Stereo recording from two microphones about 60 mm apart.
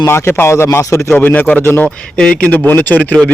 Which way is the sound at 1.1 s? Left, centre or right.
Left.